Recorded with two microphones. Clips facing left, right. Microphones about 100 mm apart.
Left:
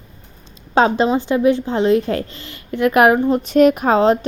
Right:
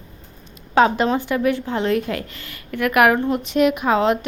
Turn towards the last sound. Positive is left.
turn(degrees=35)  # may be behind; listen again after turning